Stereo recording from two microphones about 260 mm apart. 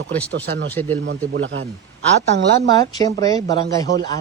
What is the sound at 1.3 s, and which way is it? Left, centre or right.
Speech, right.